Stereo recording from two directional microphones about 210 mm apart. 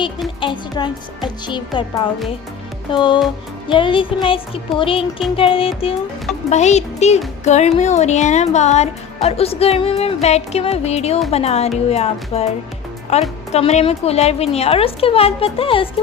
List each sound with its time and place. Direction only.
0.3 s a woman's voice: 25° left (ahead or behind)